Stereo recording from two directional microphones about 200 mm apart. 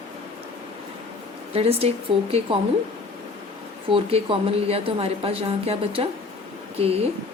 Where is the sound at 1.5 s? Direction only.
30° right (ahead or behind).